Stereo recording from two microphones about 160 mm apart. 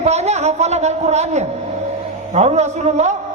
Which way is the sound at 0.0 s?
45° right (ahead or behind).